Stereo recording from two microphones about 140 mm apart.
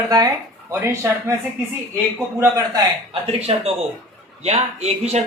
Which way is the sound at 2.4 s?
20° right (ahead or behind).